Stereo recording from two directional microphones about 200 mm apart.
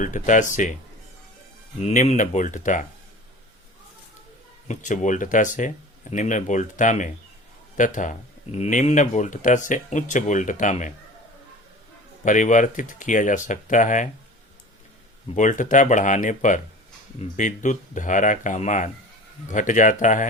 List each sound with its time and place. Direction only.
0.0 s speech: 40° left (ahead or behind)
1.8 s speech: 35° left (ahead or behind)
4.7 s speech: 40° left (ahead or behind)
12.2 s speech: 40° left (ahead or behind)
15.4 s speech: 40° left (ahead or behind)